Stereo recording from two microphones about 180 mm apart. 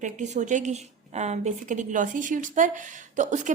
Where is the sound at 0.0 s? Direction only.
40° right (ahead or behind).